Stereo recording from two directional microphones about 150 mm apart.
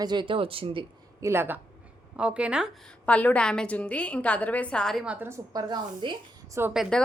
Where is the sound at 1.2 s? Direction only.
15° right (ahead or behind).